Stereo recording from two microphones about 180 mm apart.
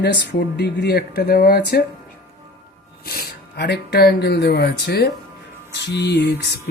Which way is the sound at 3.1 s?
60° left (ahead or behind).